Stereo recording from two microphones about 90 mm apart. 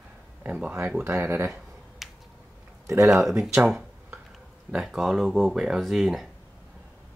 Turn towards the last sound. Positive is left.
turn(degrees=-5)  # may be behind; listen again after turning